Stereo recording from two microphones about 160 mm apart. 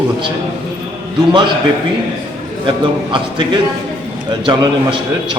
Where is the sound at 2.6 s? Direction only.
30° right (ahead or behind).